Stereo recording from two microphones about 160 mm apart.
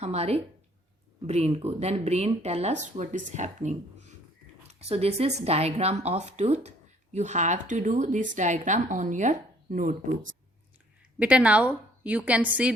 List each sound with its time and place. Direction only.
0.0 s a woman's voice: 40° right (ahead or behind)
11.2 s a woman's voice: 10° right (ahead or behind)